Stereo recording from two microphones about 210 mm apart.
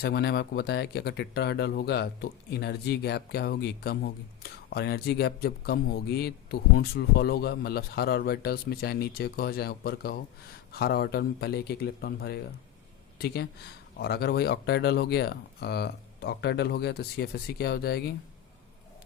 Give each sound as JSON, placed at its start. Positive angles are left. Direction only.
{"t": 0.0, "sound": "a man's voice", "side_deg": 50}